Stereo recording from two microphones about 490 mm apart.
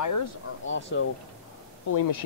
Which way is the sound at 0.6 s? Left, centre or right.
Left.